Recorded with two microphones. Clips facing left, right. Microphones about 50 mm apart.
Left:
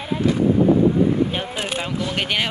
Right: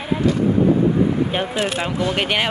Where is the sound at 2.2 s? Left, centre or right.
Centre.